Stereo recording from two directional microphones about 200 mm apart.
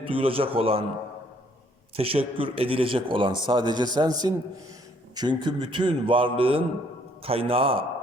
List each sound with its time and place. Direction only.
0.0 s a man's voice: 25° right (ahead or behind)
2.0 s a man's voice: 30° right (ahead or behind)